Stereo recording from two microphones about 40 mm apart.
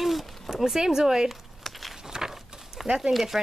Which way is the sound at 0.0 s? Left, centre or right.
Centre.